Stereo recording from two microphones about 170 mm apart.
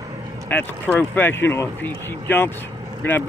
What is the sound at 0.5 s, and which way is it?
Speech, 10° left (ahead or behind).